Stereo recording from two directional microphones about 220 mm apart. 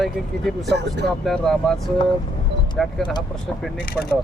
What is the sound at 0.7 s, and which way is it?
Speech, 50° right (ahead or behind).